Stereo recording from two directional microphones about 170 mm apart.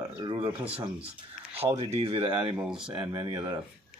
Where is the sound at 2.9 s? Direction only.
30° right (ahead or behind).